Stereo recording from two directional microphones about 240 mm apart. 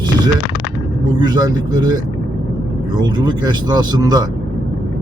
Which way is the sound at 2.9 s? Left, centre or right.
Centre.